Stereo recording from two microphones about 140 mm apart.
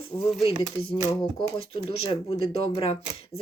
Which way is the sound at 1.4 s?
40° left (ahead or behind).